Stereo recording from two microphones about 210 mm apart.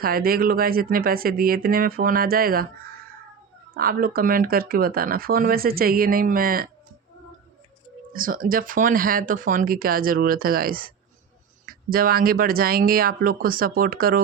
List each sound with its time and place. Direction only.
0.0 s speech: 45° right (ahead or behind)
8.1 s speech: 40° right (ahead or behind)